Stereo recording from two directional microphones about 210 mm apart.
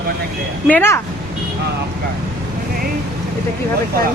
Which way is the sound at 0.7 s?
10° left (ahead or behind).